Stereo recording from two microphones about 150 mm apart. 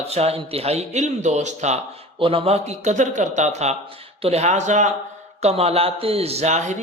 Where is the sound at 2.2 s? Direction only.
40° right (ahead or behind).